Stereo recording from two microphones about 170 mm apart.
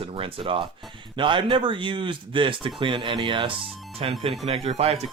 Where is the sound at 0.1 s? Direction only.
35° right (ahead or behind).